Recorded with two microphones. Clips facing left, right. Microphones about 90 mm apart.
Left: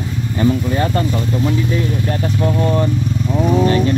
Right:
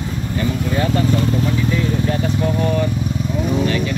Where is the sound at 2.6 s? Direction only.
35° left (ahead or behind).